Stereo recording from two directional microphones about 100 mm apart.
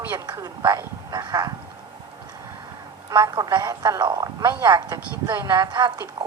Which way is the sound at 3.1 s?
35° right (ahead or behind).